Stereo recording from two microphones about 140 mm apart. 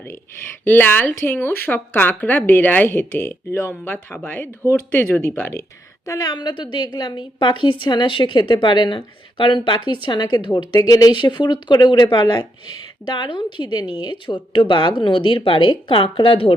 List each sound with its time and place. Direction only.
0.6 s a woman's voice: 15° left (ahead or behind); by 16.6 s 40° left (ahead or behind)